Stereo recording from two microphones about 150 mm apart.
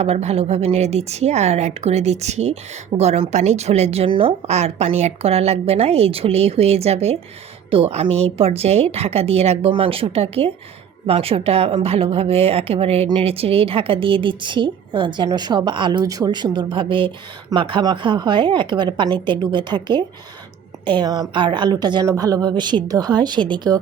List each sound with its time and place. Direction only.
0.0 s a woman's voice: 45° right (ahead or behind); by 23.8 s 25° right (ahead or behind)